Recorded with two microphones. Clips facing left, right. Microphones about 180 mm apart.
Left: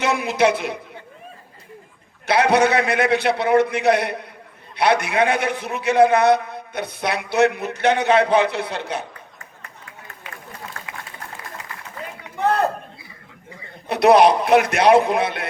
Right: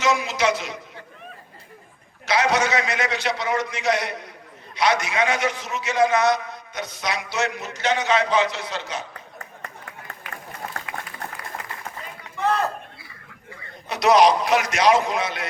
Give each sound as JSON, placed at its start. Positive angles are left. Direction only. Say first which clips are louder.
{"t": 0.0, "sound": "a woman's voice", "louder": "left 3 dB", "side_deg": 60}
{"t": 2.2, "sound": "a man's voice", "louder": "left 5 dB", "side_deg": 60}
{"t": 13.8, "sound": "a man's voice", "louder": "left 3 dB", "side_deg": 60}